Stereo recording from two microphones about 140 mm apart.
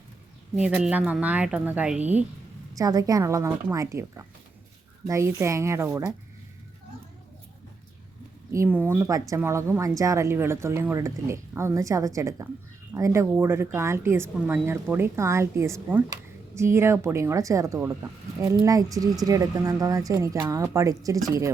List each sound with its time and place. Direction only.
0.5 s a woman's voice: 10° right (ahead or behind)
2.7 s speech: 25° right (ahead or behind)
8.4 s a woman's voice: 15° right (ahead or behind)